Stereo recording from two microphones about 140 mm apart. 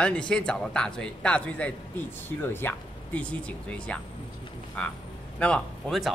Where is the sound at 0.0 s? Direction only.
5° left (ahead or behind).